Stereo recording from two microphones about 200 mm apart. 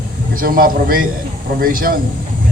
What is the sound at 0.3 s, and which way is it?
A man's voice, 45° right (ahead or behind).